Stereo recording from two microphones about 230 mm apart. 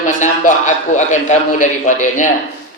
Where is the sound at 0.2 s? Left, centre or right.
Left.